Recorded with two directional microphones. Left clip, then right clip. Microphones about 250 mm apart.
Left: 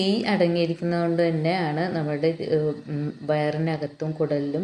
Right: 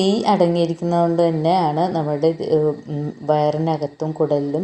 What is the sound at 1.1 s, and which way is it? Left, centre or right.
A woman's voice, centre.